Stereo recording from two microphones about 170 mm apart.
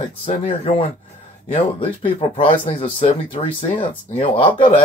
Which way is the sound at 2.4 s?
40° left (ahead or behind).